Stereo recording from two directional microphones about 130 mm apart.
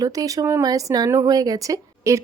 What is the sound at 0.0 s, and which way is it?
Speech, 30° right (ahead or behind).